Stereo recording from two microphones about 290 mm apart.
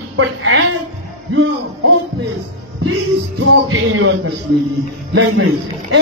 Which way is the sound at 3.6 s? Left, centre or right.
Right.